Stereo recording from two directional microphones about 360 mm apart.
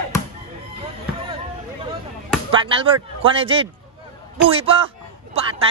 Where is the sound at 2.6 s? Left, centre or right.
Centre.